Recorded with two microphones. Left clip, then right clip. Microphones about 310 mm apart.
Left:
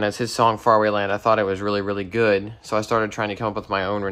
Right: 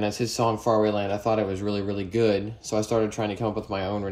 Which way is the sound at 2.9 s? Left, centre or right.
Centre.